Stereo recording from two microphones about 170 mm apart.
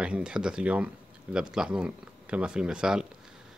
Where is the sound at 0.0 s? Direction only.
5° right (ahead or behind).